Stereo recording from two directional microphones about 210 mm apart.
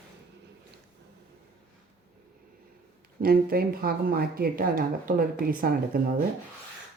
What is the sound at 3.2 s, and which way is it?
Speech, 45° right (ahead or behind).